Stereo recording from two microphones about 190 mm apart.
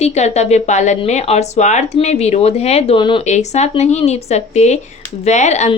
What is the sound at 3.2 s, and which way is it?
A woman's voice, 35° left (ahead or behind).